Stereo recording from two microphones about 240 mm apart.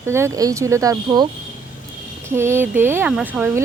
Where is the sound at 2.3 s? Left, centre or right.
Centre.